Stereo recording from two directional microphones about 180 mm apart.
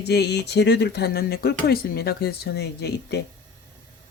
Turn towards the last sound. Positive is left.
turn(degrees=65)  # may be behind; listen again after turning